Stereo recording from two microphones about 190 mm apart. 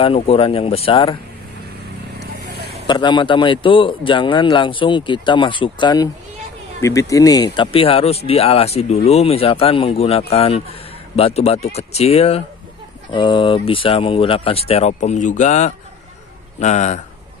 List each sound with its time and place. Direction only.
0.0 s speech: 30° left (ahead or behind)
2.9 s speech: 25° left (ahead or behind)